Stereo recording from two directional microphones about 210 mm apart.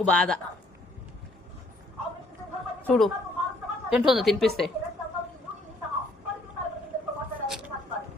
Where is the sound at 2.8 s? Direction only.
5° left (ahead or behind).